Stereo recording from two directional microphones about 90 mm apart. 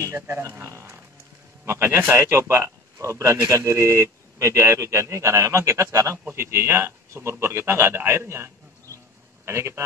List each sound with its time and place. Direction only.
0.0 s a man's voice: 30° right (ahead or behind)
9.5 s a man's voice: 30° right (ahead or behind)